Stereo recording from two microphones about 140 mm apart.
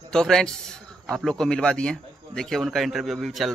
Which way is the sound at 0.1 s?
5° left (ahead or behind).